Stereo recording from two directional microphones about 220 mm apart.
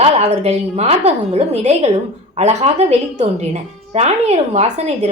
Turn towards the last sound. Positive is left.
turn(degrees=-30)  # may be behind; listen again after turning